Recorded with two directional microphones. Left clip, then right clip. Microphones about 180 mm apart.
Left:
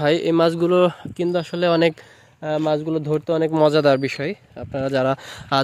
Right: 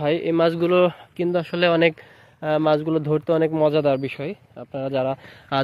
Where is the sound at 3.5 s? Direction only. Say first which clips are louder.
Left 3 dB; 45° left (ahead or behind).